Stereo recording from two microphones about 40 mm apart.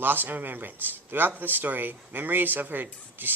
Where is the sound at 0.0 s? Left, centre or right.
Right.